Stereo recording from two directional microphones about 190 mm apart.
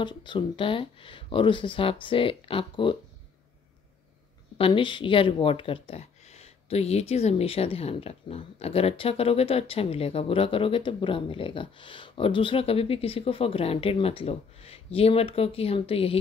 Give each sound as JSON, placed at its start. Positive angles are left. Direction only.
{"t": 0.0, "sound": "speech", "side_deg": 25}
{"t": 4.6, "sound": "speech", "side_deg": 30}